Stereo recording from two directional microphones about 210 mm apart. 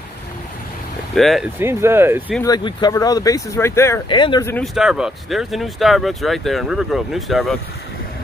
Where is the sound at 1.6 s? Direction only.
10° right (ahead or behind).